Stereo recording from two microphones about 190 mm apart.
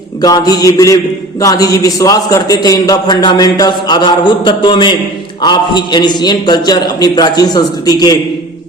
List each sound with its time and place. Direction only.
0.2 s a man's voice: 20° left (ahead or behind)